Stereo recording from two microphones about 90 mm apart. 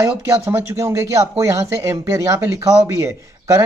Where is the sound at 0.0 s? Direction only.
35° right (ahead or behind).